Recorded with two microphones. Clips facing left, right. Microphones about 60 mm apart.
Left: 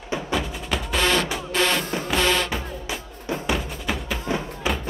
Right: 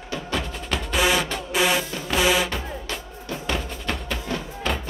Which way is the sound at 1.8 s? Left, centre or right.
Left.